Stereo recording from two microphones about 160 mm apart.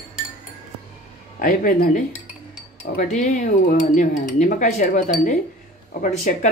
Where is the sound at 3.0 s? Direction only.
50° left (ahead or behind).